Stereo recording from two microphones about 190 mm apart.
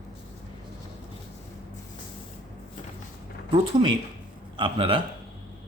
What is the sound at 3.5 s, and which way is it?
Speech, 25° right (ahead or behind).